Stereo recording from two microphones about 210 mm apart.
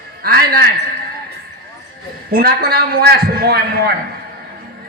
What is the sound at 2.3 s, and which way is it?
A man's voice, 45° right (ahead or behind).